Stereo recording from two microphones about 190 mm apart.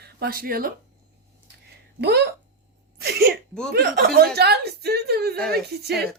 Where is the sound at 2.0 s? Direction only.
60° right (ahead or behind).